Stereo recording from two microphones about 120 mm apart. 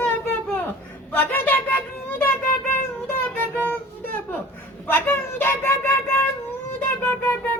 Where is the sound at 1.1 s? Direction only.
15° left (ahead or behind).